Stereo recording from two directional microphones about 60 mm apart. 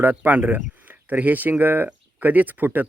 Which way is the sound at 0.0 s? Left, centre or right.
Right.